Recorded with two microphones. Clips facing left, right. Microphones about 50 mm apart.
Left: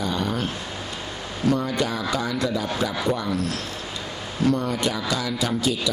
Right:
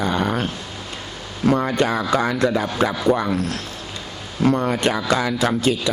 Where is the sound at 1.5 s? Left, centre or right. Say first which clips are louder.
Right 5 dB; right.